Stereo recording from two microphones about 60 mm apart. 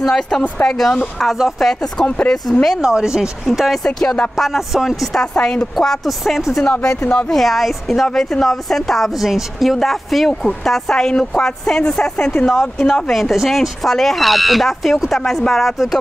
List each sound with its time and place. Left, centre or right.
0.0 s speech: centre
2.8 s speech: centre
3.8 s speech: centre
4.4 s speech: centre
5.2 s speech: centre
6.6 s speech: left
7.2 s speech: centre